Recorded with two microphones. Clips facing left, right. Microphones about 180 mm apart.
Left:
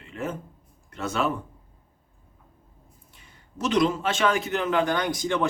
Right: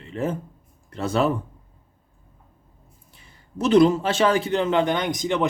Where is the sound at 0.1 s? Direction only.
30° right (ahead or behind).